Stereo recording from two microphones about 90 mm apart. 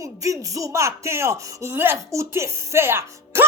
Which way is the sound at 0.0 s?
40° right (ahead or behind).